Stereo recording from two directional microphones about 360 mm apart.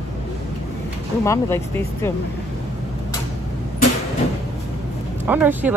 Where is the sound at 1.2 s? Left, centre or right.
Centre.